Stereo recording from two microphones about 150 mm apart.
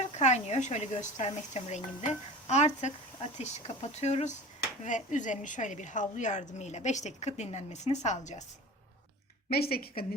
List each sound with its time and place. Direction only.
0.0 s a woman's voice: 50° left (ahead or behind)
9.5 s a woman's voice: 90° left